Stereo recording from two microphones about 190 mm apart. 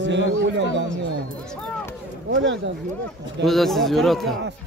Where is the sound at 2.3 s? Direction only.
70° right (ahead or behind).